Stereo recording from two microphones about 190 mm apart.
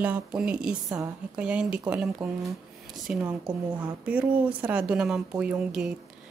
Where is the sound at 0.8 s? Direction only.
15° right (ahead or behind).